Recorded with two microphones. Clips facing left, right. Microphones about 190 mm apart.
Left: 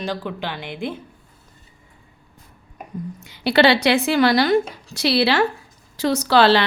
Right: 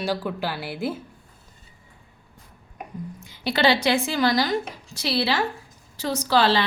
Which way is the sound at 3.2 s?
70° left (ahead or behind).